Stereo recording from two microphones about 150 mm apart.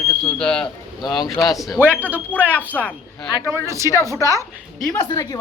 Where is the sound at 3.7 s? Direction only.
20° right (ahead or behind).